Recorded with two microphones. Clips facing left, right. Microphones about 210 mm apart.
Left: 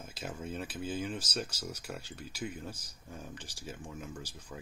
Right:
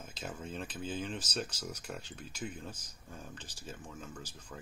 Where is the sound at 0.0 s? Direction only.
5° left (ahead or behind).